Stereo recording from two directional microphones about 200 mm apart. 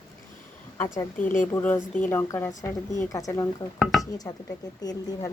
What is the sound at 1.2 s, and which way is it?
Speech, 40° left (ahead or behind).